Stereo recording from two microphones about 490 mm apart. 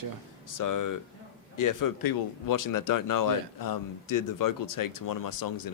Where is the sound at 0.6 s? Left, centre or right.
Left.